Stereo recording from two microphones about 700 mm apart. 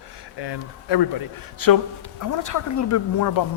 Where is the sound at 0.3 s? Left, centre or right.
Left.